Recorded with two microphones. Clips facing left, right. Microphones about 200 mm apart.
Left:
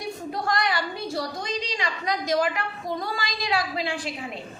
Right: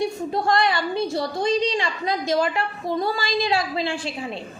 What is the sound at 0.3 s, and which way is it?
A woman's voice, 25° right (ahead or behind).